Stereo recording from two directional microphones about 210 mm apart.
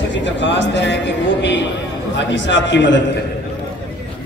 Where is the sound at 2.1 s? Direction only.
60° left (ahead or behind).